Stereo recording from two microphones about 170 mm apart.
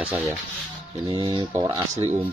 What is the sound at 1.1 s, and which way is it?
Speech, 30° right (ahead or behind).